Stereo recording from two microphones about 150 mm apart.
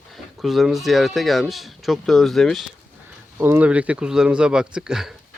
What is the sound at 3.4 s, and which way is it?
A man's voice, 10° right (ahead or behind).